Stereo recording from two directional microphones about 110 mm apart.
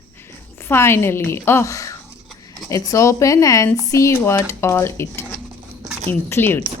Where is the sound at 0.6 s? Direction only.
20° left (ahead or behind).